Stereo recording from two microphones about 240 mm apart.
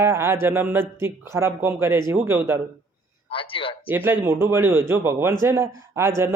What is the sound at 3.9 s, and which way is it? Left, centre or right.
A man's voice, centre.